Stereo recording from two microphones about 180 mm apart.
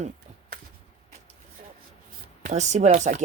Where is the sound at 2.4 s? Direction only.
40° right (ahead or behind).